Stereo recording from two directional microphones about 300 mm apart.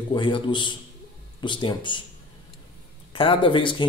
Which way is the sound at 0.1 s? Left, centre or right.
Centre.